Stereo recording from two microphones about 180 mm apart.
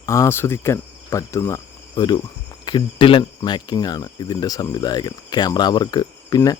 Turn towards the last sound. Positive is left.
turn(degrees=20)  # may be behind; listen again after turning